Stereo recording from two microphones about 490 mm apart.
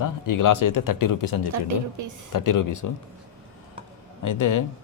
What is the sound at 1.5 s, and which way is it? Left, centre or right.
Speech, right.